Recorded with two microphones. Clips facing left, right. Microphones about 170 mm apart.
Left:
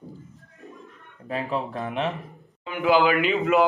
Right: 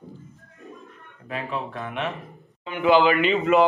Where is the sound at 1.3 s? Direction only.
35° left (ahead or behind).